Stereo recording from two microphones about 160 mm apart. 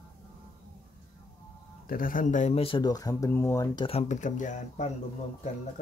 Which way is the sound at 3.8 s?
40° left (ahead or behind).